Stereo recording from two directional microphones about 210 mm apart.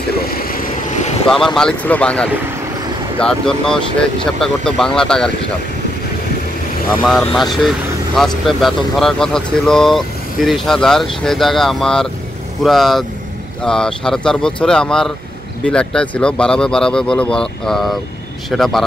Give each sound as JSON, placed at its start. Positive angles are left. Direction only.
{"t": 0.4, "sound": "vehicle", "side_deg": 45}
{"t": 1.3, "sound": "speech", "side_deg": 0}
{"t": 7.0, "sound": "speech", "side_deg": 0}